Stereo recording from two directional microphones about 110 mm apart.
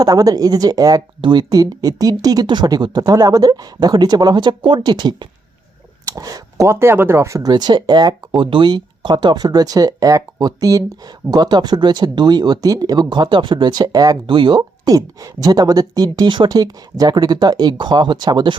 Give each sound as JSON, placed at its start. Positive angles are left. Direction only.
{"t": 0.0, "sound": "speech", "side_deg": -35}
{"t": 14.3, "sound": "speech", "side_deg": -45}
{"t": 14.9, "sound": "speech", "side_deg": -35}